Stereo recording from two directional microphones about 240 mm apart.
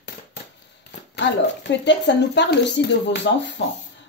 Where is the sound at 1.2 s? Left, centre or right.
Left.